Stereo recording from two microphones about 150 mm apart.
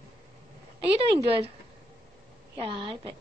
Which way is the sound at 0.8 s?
40° right (ahead or behind).